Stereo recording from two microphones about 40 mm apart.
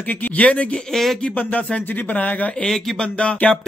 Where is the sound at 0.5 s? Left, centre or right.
Left.